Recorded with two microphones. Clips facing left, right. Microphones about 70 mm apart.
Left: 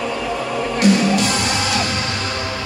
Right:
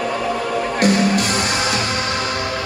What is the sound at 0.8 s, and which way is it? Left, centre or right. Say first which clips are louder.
Music: left 1 dB; right.